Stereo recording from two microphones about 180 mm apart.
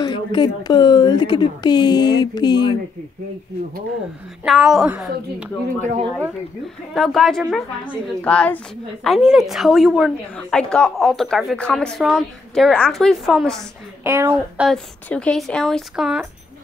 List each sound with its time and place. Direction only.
0.0 s speech: 25° left (ahead or behind)
4.5 s a woman's voice: centre (ahead or behind)
5.8 s speech: 45° right (ahead or behind)
6.9 s a woman's voice: centre (ahead or behind)
14.0 s a woman's voice: 10° right (ahead or behind)
14.7 s a woman's voice: 5° left (ahead or behind)